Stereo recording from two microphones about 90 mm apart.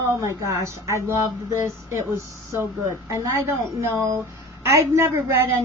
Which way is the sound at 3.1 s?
35° right (ahead or behind).